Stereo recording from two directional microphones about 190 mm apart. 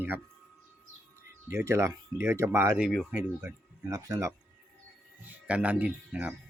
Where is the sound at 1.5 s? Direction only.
15° right (ahead or behind).